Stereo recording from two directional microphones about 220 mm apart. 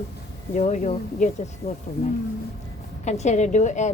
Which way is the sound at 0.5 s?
35° left (ahead or behind).